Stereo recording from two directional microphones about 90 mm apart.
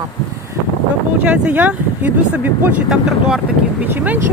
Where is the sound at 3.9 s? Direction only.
20° right (ahead or behind).